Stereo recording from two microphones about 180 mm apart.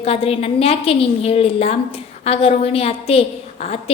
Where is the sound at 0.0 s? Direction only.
35° left (ahead or behind).